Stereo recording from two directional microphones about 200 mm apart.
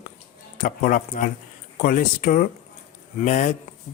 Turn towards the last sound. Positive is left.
turn(degrees=40)  # may be behind; listen again after turning